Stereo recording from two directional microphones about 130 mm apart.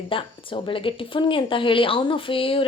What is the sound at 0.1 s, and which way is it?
Speech, 40° left (ahead or behind).